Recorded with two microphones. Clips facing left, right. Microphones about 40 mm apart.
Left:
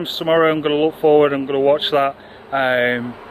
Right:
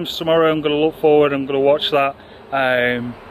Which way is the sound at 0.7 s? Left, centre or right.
Centre.